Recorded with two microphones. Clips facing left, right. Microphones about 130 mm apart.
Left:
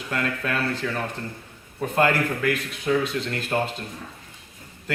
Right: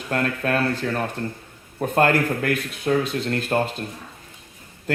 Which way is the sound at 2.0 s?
45° right (ahead or behind).